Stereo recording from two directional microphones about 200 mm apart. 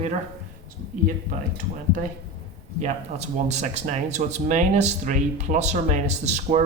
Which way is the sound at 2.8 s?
35° right (ahead or behind).